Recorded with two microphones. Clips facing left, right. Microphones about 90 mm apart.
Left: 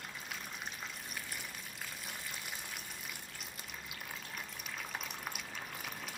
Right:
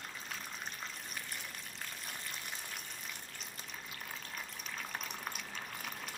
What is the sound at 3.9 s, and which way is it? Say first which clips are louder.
Water: even; 5° left (ahead or behind).